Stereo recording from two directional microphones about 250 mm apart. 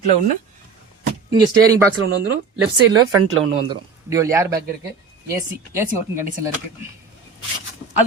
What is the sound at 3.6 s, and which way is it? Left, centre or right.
Speech, centre.